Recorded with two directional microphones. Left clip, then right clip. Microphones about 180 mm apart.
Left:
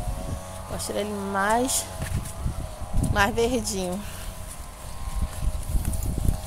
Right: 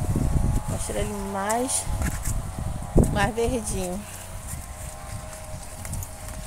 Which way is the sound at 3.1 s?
5° left (ahead or behind).